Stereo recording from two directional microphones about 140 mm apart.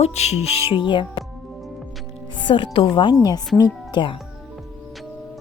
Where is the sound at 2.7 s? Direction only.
35° left (ahead or behind).